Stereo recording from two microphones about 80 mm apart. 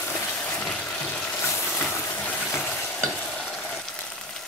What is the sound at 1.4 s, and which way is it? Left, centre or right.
Vehicle, left.